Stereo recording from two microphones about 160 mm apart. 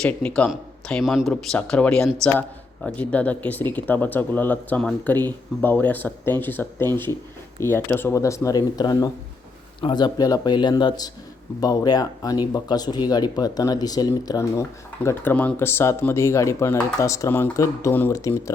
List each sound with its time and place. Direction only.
0.0 s speech: 5° left (ahead or behind)